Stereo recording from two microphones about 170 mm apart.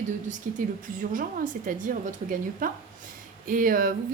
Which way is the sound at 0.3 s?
45° right (ahead or behind).